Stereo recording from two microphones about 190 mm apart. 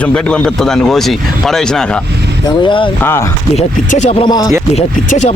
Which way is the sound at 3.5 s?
35° left (ahead or behind).